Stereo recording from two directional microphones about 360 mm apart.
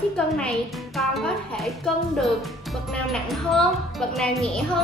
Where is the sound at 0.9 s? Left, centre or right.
Centre.